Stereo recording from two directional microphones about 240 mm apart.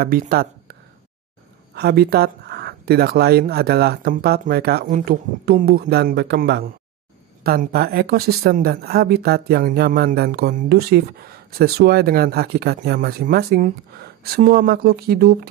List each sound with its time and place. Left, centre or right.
0.0 s speech: right
1.8 s speech: right